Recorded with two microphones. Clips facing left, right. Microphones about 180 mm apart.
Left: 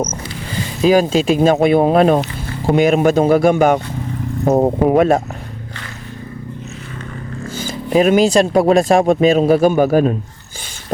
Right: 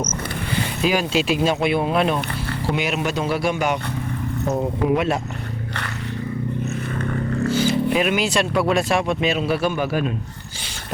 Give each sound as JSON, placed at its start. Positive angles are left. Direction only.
{"t": 0.8, "sound": "speech", "side_deg": 40}
{"t": 7.5, "sound": "vehicle", "side_deg": 45}
{"t": 7.9, "sound": "speech", "side_deg": 40}